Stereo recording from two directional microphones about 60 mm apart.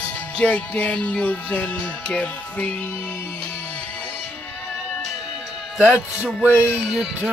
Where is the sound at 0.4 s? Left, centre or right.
Left.